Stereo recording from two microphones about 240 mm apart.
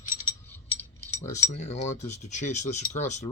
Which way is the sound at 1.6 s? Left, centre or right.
Left.